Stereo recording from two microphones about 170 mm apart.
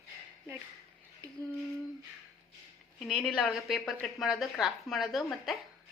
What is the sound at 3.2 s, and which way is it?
A woman's voice, centre (ahead or behind).